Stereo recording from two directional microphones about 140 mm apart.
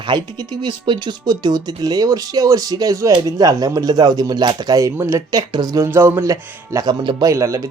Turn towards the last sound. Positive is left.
turn(degrees=-20)  # may be behind; listen again after turning